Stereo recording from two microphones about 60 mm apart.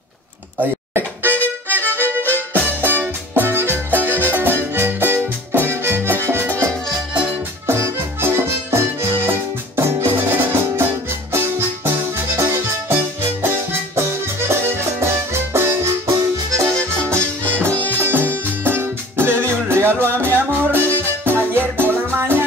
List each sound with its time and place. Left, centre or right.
0.6 s music: right
2.2 s music: left
2.8 s music: right
7.6 s music: right
16.7 s music: centre
18.0 s music: right